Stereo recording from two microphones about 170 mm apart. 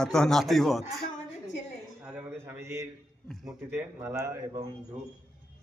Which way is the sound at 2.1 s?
10° right (ahead or behind).